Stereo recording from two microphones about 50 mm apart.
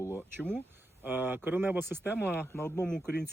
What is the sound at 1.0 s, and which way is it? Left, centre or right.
Speech, right.